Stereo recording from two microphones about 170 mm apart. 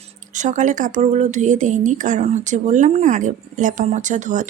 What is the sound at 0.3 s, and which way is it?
Speech, 45° right (ahead or behind).